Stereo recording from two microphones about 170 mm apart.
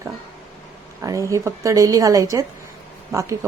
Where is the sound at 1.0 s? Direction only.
20° right (ahead or behind).